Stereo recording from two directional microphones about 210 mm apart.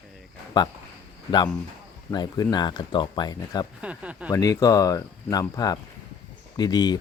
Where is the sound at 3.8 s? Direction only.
5° right (ahead or behind).